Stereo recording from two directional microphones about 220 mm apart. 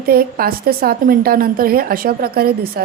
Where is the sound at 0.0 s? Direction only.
40° right (ahead or behind).